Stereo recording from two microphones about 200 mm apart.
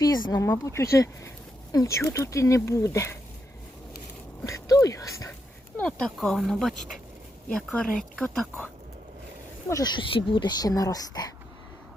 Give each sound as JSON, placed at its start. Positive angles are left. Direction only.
{"t": 0.0, "sound": "speech", "side_deg": 20}
{"t": 4.4, "sound": "speech", "side_deg": 15}
{"t": 5.7, "sound": "speech", "side_deg": 5}
{"t": 9.6, "sound": "speech", "side_deg": 20}